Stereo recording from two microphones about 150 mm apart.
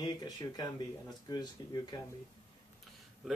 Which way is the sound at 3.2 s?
5° right (ahead or behind).